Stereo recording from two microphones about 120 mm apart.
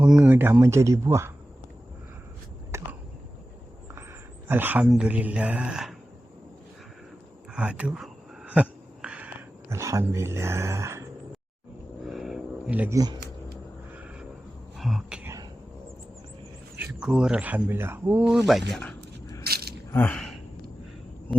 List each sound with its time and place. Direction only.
0.0 s speech: 10° right (ahead or behind)
2.7 s a sound: 20° right (ahead or behind)
4.4 s speech: 15° right (ahead or behind)
7.5 s a sound: 10° right (ahead or behind)
9.6 s speech: 25° right (ahead or behind)
12.0 s a sound: centre (ahead or behind)
12.9 s speech: 30° right (ahead or behind)
14.8 s speech: centre (ahead or behind)
16.9 s speech: 5° right (ahead or behind)
18.4 s speech: centre (ahead or behind)
19.9 s speech: 15° left (ahead or behind)